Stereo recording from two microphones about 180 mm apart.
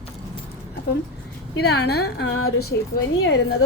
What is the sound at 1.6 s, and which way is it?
A woman's voice, 65° left (ahead or behind).